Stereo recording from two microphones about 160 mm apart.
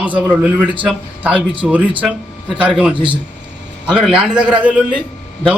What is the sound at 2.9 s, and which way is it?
Speech, 30° right (ahead or behind).